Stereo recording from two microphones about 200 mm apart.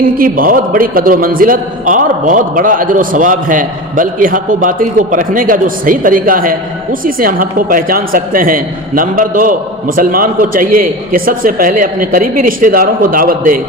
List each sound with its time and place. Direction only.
0.2 s a man's voice: 45° right (ahead or behind)